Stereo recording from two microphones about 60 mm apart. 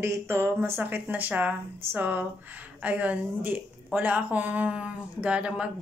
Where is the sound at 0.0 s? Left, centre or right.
Right.